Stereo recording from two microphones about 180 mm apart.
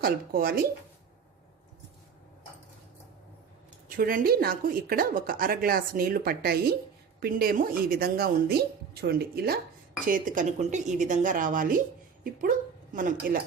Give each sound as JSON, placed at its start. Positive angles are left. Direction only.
{"t": 0.0, "sound": "a woman's voice", "side_deg": -55}
{"t": 3.8, "sound": "a woman's voice", "side_deg": -50}
{"t": 10.1, "sound": "a woman's voice", "side_deg": -50}